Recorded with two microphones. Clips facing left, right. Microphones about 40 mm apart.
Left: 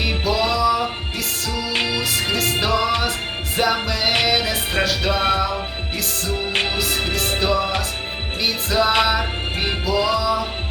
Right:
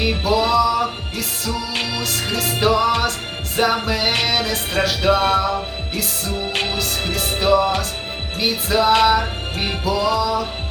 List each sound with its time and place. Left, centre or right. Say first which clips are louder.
0.0 s music: right 2 dB; centre
1.5 s music: left 3 dB; left
2.0 s music: left 1 dB; centre
2.6 s music: right 6 dB; centre
4.3 s music: left 1 dB; centre
4.8 s music: right 4 dB; centre
5.1 s music: right 2 dB; left
6.7 s music: left 1 dB; centre
9.9 s music: even; centre
10.2 s music: right 1 dB; centre